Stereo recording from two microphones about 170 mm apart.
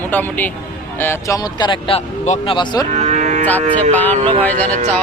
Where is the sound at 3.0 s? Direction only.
45° right (ahead or behind).